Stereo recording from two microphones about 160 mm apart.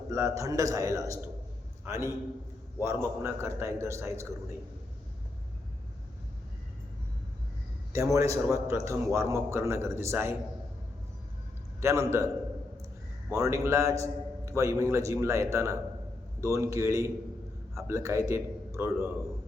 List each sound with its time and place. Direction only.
0.1 s a man's voice: 20° right (ahead or behind)
7.9 s a man's voice: 20° right (ahead or behind)
11.8 s a man's voice: 15° right (ahead or behind)
13.3 s a man's voice: 20° right (ahead or behind)